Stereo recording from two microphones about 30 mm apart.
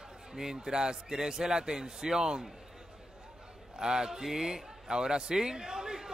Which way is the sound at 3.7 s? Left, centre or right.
Right.